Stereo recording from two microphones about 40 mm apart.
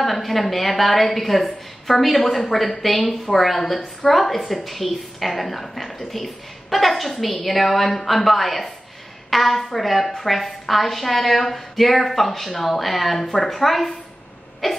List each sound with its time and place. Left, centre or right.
0.0 s a woman's voice: centre